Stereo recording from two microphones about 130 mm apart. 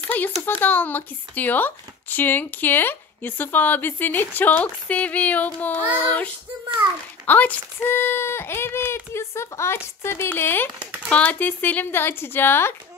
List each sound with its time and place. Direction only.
0.5 s speech: 15° left (ahead or behind)
10.8 s speech: 10° right (ahead or behind)
11.1 s speech: 10° left (ahead or behind)